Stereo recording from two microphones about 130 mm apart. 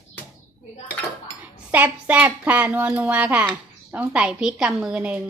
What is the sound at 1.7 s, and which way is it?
Speech, 10° right (ahead or behind).